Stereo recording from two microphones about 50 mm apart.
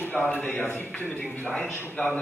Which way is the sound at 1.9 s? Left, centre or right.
Left.